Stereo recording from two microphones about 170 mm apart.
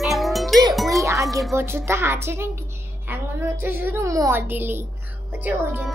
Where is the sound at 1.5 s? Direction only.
15° right (ahead or behind).